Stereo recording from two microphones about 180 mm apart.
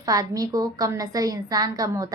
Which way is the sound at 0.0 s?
20° right (ahead or behind).